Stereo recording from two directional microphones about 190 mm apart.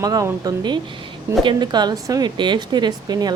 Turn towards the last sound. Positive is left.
turn(degrees=-20)  # may be behind; listen again after turning